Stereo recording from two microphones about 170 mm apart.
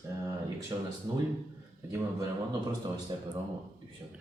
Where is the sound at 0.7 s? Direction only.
25° right (ahead or behind).